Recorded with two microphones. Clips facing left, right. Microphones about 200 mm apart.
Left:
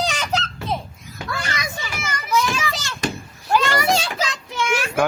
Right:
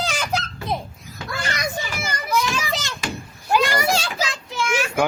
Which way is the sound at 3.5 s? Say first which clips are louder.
Even; 15° right (ahead or behind).